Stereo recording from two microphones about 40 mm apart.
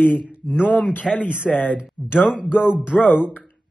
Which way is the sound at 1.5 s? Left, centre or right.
Left.